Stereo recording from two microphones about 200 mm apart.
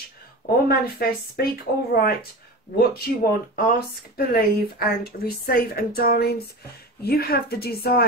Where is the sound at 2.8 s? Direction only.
50° left (ahead or behind).